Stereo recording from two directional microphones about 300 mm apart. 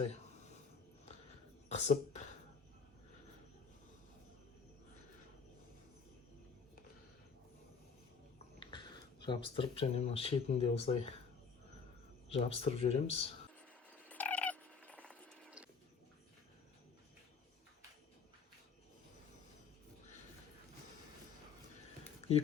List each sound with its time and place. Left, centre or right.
1.7 s speech: left
8.5 s speech: centre
12.3 s speech: centre
14.1 s a sound: centre